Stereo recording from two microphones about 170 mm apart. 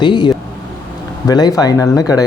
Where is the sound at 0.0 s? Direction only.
25° left (ahead or behind).